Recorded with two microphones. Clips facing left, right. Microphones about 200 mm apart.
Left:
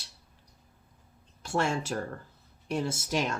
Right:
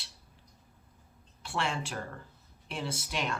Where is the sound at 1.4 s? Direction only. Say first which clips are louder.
Left 5 dB; 45° left (ahead or behind).